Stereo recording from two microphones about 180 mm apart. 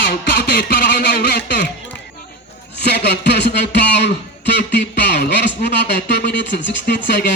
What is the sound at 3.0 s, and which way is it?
Speech, 70° left (ahead or behind).